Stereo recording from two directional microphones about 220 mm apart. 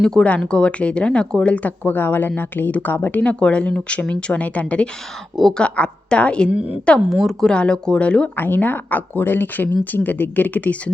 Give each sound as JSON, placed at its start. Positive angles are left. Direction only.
{"t": 0.0, "sound": "speech", "side_deg": 5}
{"t": 6.5, "sound": "a woman's voice", "side_deg": -5}